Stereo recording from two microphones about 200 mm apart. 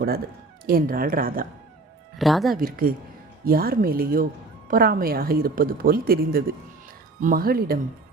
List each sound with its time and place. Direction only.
0.6 s speech: 45° right (ahead or behind)
2.1 s speech: centre (ahead or behind)
2.6 s speech: 45° right (ahead or behind)